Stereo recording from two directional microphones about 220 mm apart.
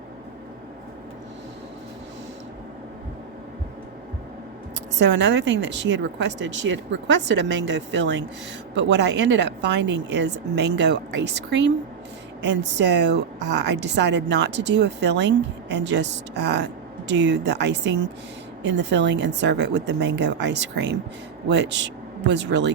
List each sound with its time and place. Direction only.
4.9 s a woman's voice: 55° right (ahead or behind)